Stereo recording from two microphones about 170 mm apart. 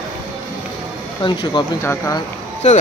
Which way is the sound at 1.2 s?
25° left (ahead or behind).